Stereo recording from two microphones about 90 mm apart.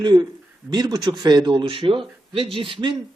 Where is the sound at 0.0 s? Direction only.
55° right (ahead or behind); by 2.9 s 75° right (ahead or behind).